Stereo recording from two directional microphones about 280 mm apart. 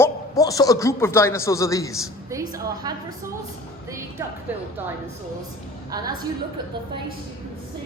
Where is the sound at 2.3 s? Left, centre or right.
Centre.